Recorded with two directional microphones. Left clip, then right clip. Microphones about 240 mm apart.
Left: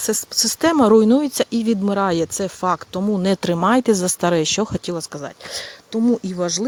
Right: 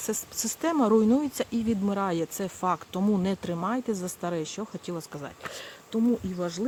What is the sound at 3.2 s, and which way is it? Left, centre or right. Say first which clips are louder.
Speech: left 12 dB; left.